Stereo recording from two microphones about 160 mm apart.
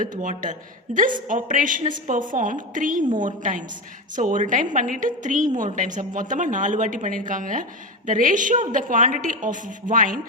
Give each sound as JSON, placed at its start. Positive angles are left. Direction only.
{"t": 0.0, "sound": "a woman's voice", "side_deg": -55}